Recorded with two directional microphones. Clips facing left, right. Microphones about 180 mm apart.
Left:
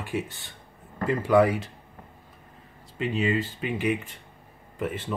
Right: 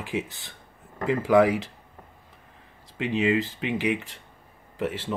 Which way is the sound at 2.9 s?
85° right.